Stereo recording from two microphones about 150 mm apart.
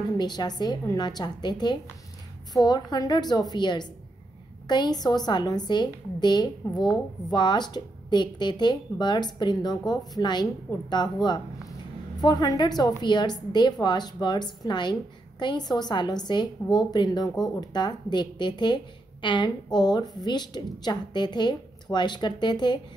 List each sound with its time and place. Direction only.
0.2 s a woman's voice: 30° left (ahead or behind)